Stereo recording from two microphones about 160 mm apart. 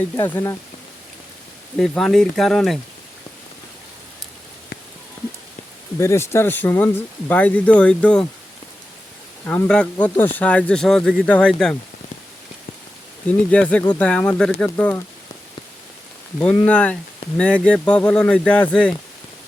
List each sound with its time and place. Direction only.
0.2 s speech: 15° left (ahead or behind)
1.8 s speech: 5° left (ahead or behind)
6.0 s speech: 15° left (ahead or behind)
9.5 s speech: 5° left (ahead or behind)
13.2 s speech: 10° left (ahead or behind)
16.6 s speech: 10° left (ahead or behind)